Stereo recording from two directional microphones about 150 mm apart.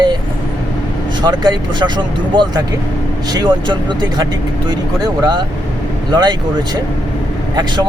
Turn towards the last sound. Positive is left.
turn(degrees=-25)  # may be behind; listen again after turning